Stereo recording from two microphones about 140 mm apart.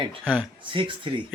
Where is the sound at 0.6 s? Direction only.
35° right (ahead or behind).